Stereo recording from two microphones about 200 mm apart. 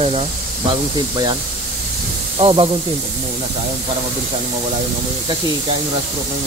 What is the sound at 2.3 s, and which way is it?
Speech, 25° right (ahead or behind).